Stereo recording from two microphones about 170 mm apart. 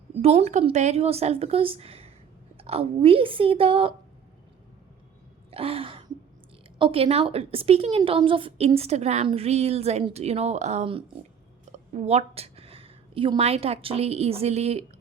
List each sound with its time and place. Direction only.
0.2 s a woman's voice: 40° right (ahead or behind)
5.5 s a sound: 35° right (ahead or behind)
6.7 s a woman's voice: 30° right (ahead or behind)